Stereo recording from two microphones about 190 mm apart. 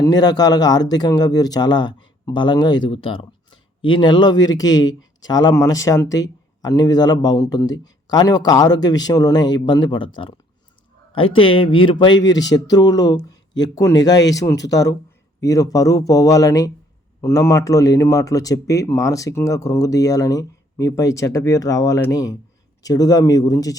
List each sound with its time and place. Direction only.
0.0 s speech: 20° left (ahead or behind)
11.3 s speech: 25° left (ahead or behind)